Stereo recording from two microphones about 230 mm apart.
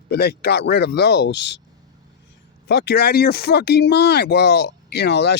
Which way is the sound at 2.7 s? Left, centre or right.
Left.